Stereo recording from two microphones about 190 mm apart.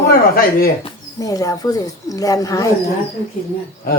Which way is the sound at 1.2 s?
20° left (ahead or behind).